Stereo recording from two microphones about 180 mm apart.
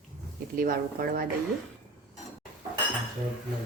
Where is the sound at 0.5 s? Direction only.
50° right (ahead or behind).